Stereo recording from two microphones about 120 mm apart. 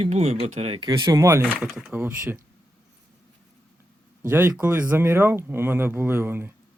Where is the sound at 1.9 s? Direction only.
20° right (ahead or behind).